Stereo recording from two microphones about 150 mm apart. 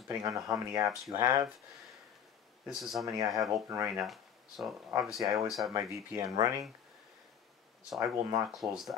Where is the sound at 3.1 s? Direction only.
25° right (ahead or behind).